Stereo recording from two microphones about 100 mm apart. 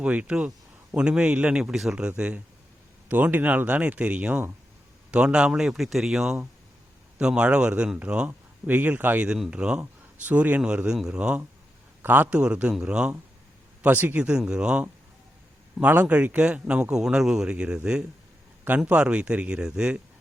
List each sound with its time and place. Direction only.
0.0 s speech: 10° right (ahead or behind)
13.8 s speech: 20° right (ahead or behind)
14.3 s speech: 10° right (ahead or behind)